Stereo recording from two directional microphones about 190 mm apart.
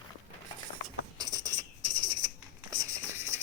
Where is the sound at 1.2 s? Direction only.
20° right (ahead or behind).